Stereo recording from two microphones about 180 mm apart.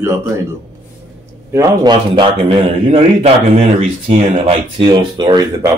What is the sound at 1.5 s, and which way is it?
A man's voice, 20° right (ahead or behind).